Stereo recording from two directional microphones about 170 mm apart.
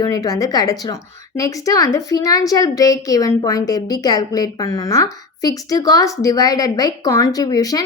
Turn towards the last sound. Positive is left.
turn(degrees=20)  # may be behind; listen again after turning